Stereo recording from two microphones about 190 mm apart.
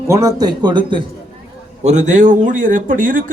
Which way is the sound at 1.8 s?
40° right (ahead or behind).